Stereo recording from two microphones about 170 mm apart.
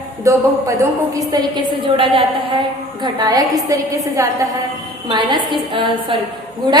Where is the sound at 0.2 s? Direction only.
15° right (ahead or behind).